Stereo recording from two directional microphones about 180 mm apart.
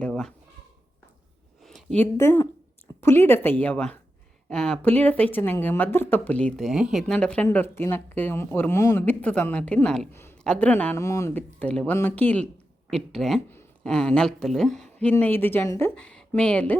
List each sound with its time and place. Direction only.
0.0 s speech: 5° left (ahead or behind)
1.6 s a sound: 5° left (ahead or behind)
2.1 s speech: 15° left (ahead or behind)